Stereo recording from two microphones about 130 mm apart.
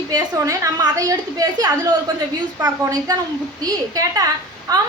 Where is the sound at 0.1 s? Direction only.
25° right (ahead or behind).